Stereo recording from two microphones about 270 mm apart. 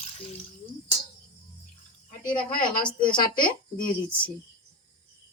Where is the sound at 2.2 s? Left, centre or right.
Centre.